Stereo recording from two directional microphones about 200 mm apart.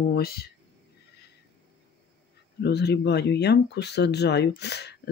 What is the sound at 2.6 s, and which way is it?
Speech, 55° left (ahead or behind).